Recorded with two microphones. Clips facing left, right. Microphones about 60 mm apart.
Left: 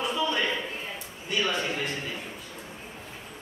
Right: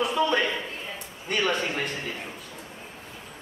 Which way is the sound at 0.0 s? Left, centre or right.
Right.